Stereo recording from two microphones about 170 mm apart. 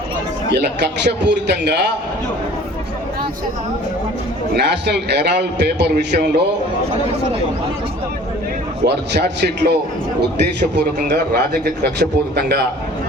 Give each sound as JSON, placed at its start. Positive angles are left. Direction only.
{"t": 0.5, "sound": "a man's voice", "side_deg": -85}
{"t": 4.5, "sound": "a man's voice", "side_deg": -80}
{"t": 8.8, "sound": "a man's voice", "side_deg": -80}
{"t": 10.8, "sound": "a man's voice", "side_deg": -75}